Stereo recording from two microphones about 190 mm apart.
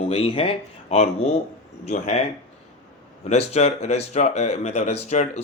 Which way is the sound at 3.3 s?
35° left (ahead or behind).